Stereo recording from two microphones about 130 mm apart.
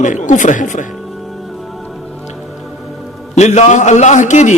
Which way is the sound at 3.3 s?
60° left (ahead or behind).